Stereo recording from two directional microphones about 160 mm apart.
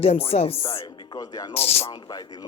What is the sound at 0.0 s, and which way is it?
Speech, 40° left (ahead or behind).